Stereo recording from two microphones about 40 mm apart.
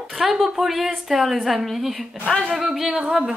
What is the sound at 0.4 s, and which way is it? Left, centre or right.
A woman's voice, centre.